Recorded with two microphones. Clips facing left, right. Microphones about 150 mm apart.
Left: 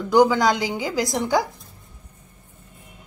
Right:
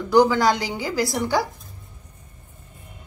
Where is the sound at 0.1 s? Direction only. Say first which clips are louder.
Even; 15° left (ahead or behind).